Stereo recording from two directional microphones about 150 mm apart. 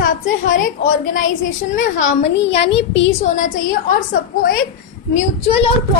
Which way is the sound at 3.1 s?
60° left (ahead or behind).